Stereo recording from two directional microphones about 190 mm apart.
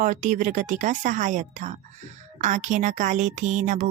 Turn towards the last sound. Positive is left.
turn(degrees=-40)  # may be behind; listen again after turning